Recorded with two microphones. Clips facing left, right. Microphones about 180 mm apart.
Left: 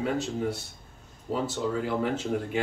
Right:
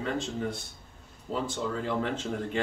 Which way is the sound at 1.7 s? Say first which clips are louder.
Left 2 dB; 10° left (ahead or behind).